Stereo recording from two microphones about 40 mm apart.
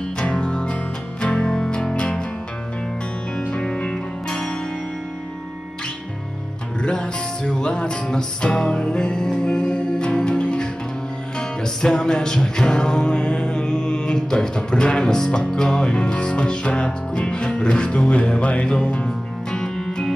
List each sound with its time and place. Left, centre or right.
0.2 s music: left
3.4 s music: left
6.8 s music: left